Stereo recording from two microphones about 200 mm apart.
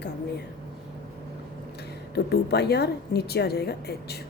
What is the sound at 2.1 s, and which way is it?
A woman's voice, 55° left (ahead or behind).